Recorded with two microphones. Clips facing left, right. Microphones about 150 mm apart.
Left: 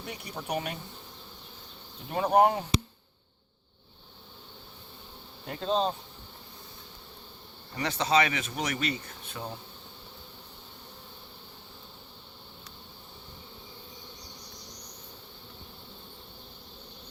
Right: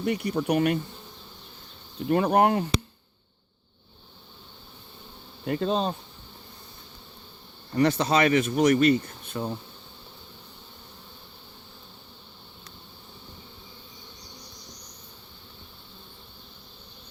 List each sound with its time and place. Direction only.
0.0 s speech: 70° right (ahead or behind)
2.0 s speech: 70° right (ahead or behind)
5.5 s insect: 60° right (ahead or behind)
7.8 s speech: 55° right (ahead or behind)